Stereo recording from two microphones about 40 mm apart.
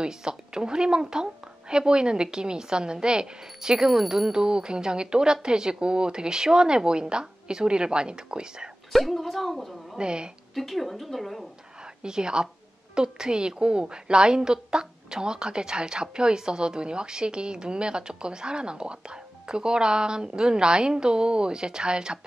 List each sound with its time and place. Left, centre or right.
0.0 s a woman's voice: centre
9.1 s a woman's voice: centre
9.9 s a woman's voice: right
10.5 s a woman's voice: centre
11.8 s a woman's voice: right